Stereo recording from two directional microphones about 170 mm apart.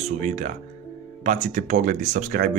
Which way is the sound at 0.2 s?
40° right (ahead or behind).